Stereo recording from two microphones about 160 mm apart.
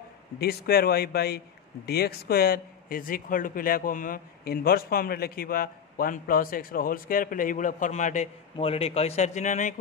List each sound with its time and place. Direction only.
0.4 s a man's voice: 75° left (ahead or behind); by 9.8 s 50° left (ahead or behind)